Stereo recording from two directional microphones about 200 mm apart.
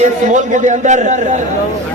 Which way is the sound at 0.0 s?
40° right (ahead or behind).